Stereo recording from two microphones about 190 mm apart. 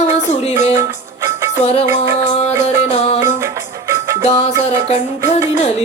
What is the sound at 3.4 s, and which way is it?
Music, 15° right (ahead or behind).